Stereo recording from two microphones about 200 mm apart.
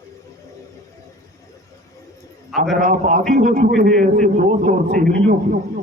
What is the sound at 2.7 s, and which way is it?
A man's voice, 40° right (ahead or behind).